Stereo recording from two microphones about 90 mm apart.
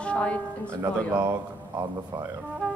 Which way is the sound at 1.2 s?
40° right (ahead or behind).